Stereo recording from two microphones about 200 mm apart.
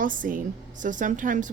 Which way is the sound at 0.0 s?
40° right (ahead or behind).